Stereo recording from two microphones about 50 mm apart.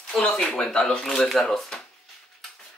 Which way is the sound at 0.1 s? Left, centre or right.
Centre.